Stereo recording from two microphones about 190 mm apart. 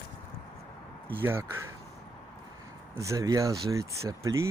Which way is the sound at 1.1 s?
10° right (ahead or behind).